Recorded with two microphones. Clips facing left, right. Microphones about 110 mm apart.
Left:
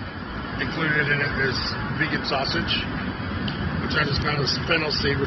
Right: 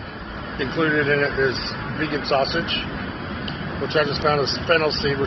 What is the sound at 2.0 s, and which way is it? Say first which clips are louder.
Speech: right 7 dB; 55° right (ahead or behind).